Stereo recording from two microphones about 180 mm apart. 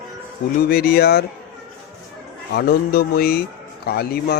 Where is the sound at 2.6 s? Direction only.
60° left (ahead or behind).